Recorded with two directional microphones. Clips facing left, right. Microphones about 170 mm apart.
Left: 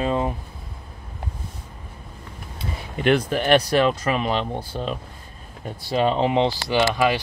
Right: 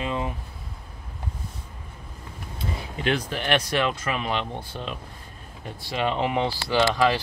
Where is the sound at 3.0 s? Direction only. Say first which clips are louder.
Left 7 dB; 50° left (ahead or behind).